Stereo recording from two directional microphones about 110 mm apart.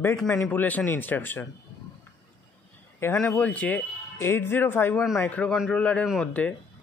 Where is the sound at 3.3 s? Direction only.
15° left (ahead or behind).